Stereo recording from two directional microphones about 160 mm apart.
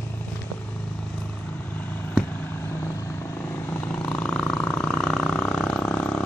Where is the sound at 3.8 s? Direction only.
10° left (ahead or behind).